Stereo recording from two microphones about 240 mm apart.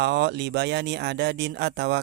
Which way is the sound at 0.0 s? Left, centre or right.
Right.